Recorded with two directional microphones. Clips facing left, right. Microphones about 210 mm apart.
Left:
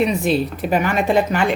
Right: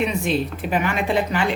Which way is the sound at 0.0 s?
40° left (ahead or behind).